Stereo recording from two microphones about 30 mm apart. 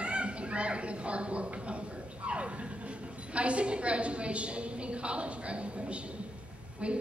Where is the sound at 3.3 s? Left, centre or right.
Right.